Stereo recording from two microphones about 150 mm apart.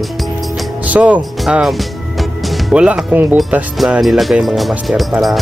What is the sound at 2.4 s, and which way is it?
Speech, centre (ahead or behind).